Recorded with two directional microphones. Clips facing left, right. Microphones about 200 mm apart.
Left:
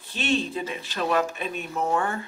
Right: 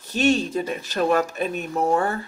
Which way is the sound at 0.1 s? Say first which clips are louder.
Right 6 dB; 40° right (ahead or behind).